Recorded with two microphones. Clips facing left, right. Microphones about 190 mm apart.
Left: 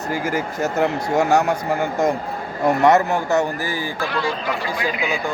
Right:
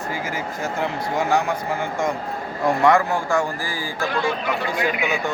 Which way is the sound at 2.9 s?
25° left (ahead or behind).